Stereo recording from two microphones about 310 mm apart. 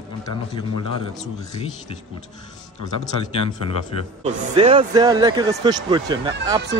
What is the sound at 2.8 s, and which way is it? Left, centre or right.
Speech, centre.